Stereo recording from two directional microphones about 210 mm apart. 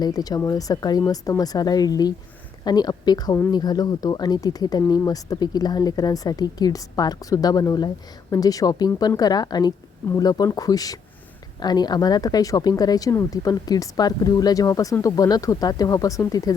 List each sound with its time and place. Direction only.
0.0 s speech: 15° left (ahead or behind)